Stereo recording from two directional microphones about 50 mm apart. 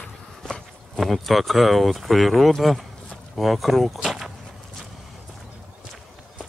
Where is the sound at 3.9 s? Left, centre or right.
Centre.